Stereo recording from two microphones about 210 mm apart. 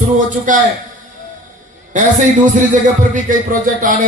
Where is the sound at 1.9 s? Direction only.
35° right (ahead or behind).